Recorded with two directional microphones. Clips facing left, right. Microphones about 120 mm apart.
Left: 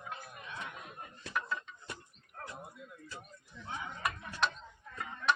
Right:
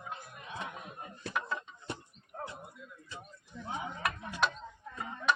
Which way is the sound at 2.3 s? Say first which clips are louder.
Right 6 dB; 25° right (ahead or behind).